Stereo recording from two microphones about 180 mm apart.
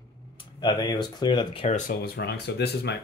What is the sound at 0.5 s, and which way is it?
Speech, 25° left (ahead or behind).